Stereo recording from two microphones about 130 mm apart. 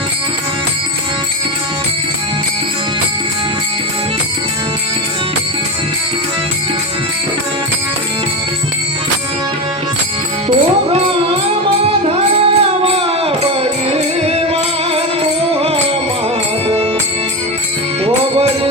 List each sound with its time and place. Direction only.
12.4 s music: 50° right (ahead or behind)
18.0 s music: 50° right (ahead or behind)